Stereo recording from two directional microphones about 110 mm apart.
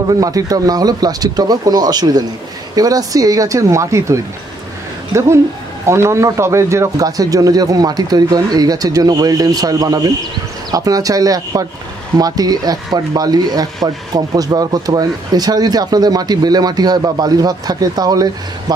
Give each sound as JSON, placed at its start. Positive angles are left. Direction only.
{"t": 0.1, "sound": "a man's voice", "side_deg": -35}
{"t": 5.9, "sound": "a man's voice", "side_deg": -25}